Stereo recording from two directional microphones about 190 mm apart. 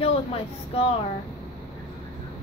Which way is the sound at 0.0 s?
30° left (ahead or behind).